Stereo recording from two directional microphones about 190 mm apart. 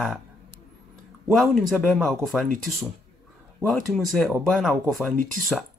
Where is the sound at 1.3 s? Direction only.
Centre (ahead or behind).